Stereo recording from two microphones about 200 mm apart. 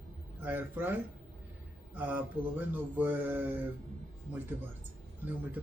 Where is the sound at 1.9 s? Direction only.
10° right (ahead or behind).